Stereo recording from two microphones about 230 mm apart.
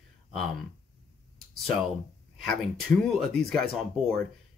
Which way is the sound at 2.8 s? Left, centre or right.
Centre.